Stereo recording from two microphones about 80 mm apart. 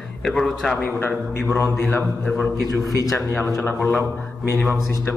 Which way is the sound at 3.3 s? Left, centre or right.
Left.